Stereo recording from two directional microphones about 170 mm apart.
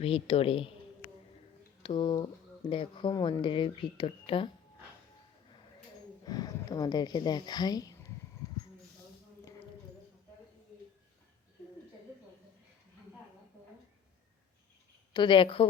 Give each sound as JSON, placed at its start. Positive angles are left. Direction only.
{"t": 0.0, "sound": "speech", "side_deg": 35}
{"t": 1.8, "sound": "speech", "side_deg": 30}
{"t": 6.2, "sound": "speech", "side_deg": 25}
{"t": 15.1, "sound": "speech", "side_deg": 25}